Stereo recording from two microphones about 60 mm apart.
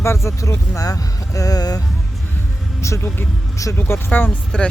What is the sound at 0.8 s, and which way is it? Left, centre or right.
Speech, left.